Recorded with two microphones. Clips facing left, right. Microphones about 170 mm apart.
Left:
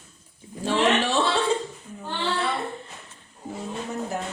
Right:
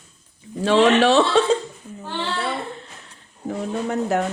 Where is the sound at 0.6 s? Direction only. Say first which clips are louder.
Right 7 dB; 85° right.